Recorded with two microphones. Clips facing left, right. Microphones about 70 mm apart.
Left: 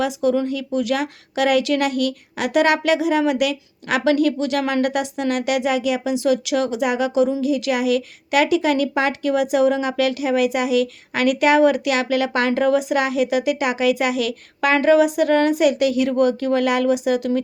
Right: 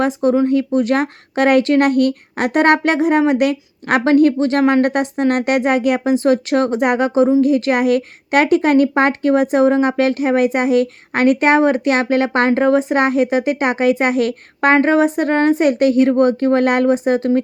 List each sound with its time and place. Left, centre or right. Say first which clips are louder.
0.0 s a woman's voice: right 4 dB; right